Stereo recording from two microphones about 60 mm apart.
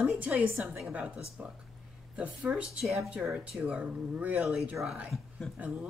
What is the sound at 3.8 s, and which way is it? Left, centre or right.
Speech, right.